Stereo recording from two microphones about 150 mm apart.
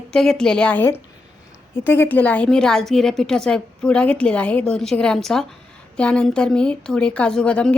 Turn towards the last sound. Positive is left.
turn(degrees=5)  # may be behind; listen again after turning